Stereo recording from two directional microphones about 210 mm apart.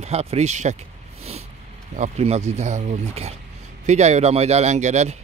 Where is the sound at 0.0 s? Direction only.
30° right (ahead or behind).